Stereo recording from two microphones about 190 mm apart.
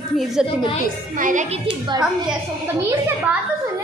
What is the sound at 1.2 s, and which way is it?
Speech, 40° right (ahead or behind).